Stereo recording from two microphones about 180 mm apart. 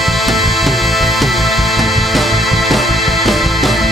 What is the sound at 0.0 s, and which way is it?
Music, centre (ahead or behind).